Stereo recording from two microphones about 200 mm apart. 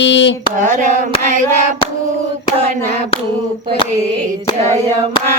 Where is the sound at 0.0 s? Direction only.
65° left (ahead or behind).